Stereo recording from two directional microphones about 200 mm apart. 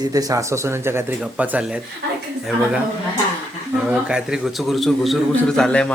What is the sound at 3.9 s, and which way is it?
A man's voice, 5° right (ahead or behind).